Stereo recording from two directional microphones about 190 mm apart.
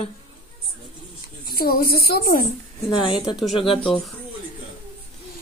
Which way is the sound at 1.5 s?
50° left (ahead or behind).